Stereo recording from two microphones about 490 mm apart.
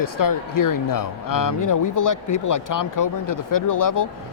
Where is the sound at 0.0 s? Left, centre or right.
Left.